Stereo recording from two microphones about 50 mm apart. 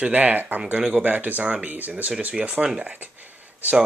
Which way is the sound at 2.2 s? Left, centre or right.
Right.